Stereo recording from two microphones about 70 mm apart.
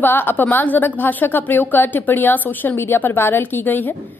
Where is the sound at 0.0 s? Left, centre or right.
Left.